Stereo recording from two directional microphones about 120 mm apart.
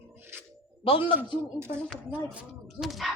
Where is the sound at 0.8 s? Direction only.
50° left (ahead or behind).